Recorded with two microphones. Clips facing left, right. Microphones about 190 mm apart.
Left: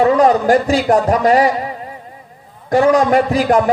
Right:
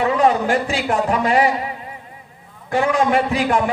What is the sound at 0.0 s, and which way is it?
A man's voice, 40° left (ahead or behind).